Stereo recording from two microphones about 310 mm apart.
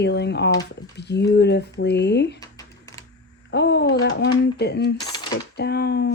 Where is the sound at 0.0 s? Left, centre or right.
Left.